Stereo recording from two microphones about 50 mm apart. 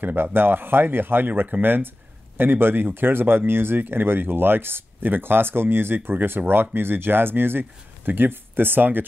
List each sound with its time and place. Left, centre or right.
0.0 s speech: right